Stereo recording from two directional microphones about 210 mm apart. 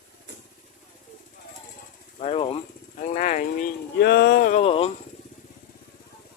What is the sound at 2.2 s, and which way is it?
Speech, 25° left (ahead or behind).